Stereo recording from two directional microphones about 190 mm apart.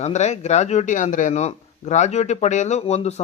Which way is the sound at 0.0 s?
35° left (ahead or behind).